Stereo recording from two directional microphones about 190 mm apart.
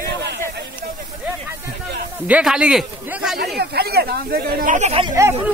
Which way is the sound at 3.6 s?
55° right (ahead or behind).